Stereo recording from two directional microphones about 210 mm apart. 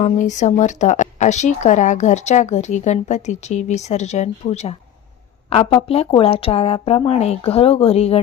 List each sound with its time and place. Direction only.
0.0 s speech: 35° left (ahead or behind)